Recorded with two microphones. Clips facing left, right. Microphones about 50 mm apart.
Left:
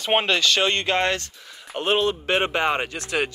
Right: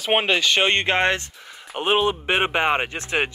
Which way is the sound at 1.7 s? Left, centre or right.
Centre.